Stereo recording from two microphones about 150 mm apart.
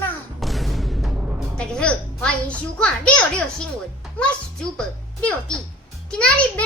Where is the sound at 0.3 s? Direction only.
Centre (ahead or behind).